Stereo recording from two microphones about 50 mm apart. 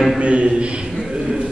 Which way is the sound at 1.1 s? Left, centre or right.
Centre.